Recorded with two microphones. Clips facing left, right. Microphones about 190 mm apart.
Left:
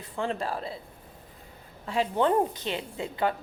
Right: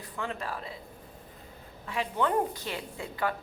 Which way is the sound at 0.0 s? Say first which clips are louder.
Left 5 dB; 30° left (ahead or behind).